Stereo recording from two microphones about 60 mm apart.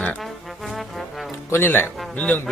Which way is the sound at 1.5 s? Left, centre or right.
Left.